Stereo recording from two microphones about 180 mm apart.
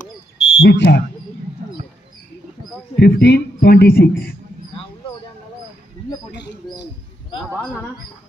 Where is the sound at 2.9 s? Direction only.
60° left (ahead or behind).